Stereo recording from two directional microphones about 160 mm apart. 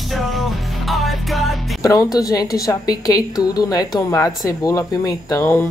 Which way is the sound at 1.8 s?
20° left (ahead or behind).